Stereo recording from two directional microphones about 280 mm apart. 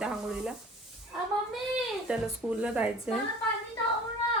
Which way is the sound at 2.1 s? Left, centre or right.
Centre.